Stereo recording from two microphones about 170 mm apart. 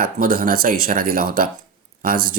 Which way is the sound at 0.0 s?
55° right (ahead or behind).